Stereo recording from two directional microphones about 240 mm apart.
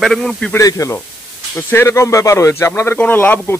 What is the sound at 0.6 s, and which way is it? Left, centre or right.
Speech, centre.